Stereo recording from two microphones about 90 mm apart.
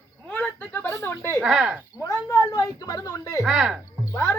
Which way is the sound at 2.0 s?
40° left (ahead or behind).